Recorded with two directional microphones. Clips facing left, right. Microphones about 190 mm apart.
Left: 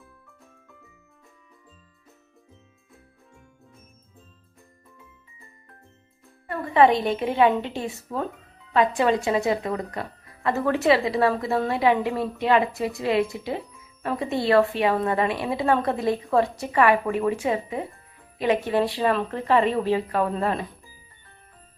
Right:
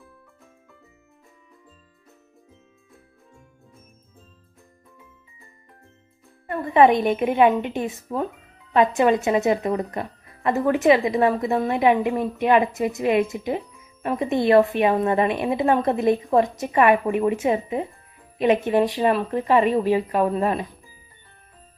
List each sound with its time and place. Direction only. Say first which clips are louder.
6.5 s speech: right 2 dB; 20° right (ahead or behind)